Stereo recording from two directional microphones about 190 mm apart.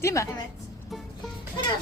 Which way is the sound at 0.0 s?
15° left (ahead or behind).